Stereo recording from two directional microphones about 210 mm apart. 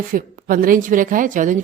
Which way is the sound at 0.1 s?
40° right (ahead or behind).